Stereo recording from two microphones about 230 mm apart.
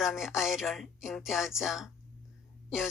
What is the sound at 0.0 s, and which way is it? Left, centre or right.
A woman's voice, centre.